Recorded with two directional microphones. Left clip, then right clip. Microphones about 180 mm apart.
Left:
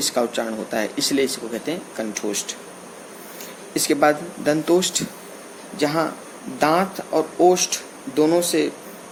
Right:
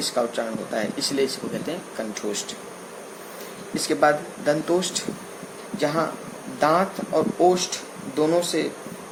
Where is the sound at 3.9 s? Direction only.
45° left (ahead or behind).